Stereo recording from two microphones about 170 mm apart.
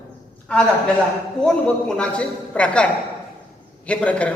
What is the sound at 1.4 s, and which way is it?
A woman's voice, 5° left (ahead or behind).